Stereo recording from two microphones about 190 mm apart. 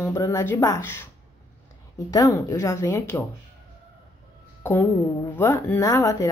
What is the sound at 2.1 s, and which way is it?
Speech, 20° left (ahead or behind).